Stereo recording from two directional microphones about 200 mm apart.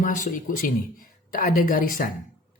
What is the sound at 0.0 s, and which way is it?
Speech, 40° left (ahead or behind).